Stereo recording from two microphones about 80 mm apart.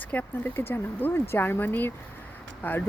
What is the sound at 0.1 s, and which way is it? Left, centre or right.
Speech, left.